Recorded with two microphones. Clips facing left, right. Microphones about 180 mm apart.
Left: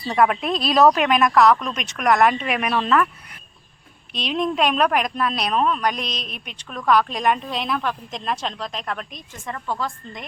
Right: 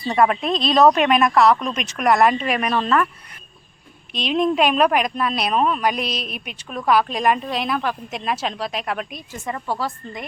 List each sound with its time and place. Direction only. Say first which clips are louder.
0.1 s speech: right 1 dB; centre (ahead or behind)
4.1 s speech: right 4 dB; centre (ahead or behind)